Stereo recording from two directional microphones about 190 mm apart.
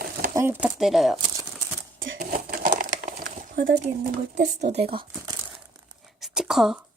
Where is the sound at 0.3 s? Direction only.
10° right (ahead or behind).